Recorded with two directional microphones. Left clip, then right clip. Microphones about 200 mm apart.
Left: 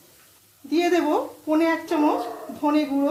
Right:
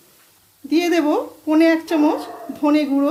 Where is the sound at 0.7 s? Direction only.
40° right (ahead or behind).